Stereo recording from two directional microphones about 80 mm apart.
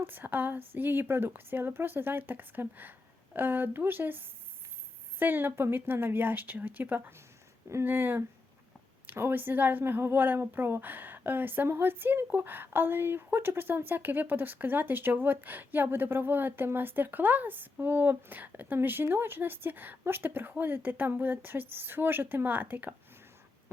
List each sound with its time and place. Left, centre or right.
0.0 s speech: right